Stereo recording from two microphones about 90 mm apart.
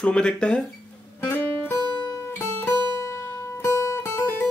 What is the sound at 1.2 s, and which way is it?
Music, 25° left (ahead or behind).